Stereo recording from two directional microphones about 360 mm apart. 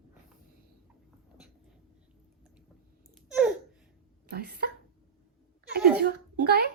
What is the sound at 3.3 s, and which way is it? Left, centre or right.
Babbling, centre.